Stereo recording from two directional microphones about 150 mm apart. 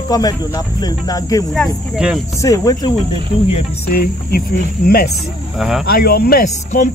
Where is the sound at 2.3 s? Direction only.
20° left (ahead or behind).